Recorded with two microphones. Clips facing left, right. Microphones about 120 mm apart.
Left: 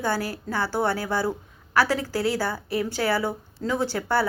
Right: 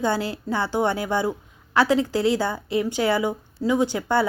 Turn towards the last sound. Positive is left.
turn(degrees=-15)  # may be behind; listen again after turning